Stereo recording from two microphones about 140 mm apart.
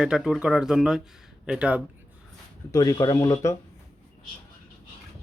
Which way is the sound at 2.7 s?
25° left (ahead or behind).